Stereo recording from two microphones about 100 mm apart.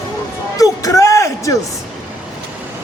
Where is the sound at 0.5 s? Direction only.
35° left (ahead or behind).